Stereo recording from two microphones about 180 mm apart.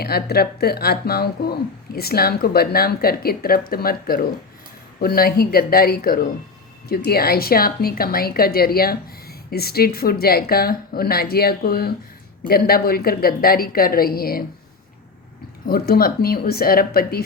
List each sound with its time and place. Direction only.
0.0 s a woman's voice: 60° left (ahead or behind)
15.6 s a woman's voice: 55° left (ahead or behind)